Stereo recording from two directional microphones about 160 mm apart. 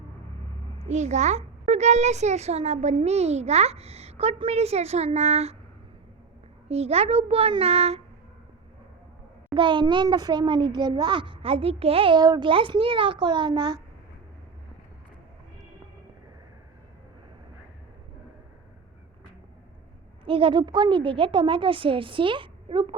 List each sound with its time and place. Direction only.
0.8 s a child's voice: 45° right (ahead or behind)
6.7 s a child's voice: 40° right (ahead or behind)
9.6 s a child's voice: 30° right (ahead or behind)
20.2 s a child's voice: 35° right (ahead or behind)